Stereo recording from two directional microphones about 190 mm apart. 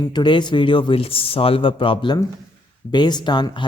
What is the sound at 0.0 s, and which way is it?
Speech, 25° left (ahead or behind).